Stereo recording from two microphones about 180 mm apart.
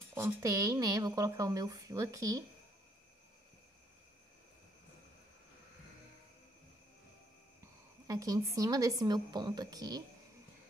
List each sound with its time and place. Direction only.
0.1 s speech: 15° right (ahead or behind)
7.6 s a woman's voice: 20° right (ahead or behind)